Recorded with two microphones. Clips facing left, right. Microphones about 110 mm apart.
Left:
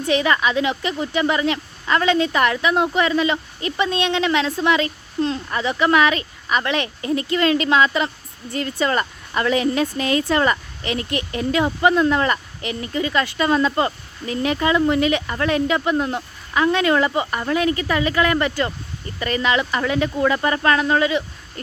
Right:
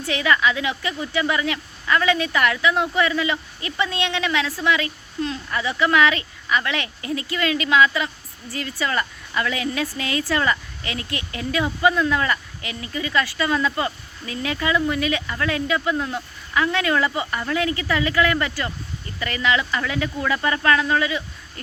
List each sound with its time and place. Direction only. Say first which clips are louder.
0.0 s speech: left 2 dB; 20° left (ahead or behind)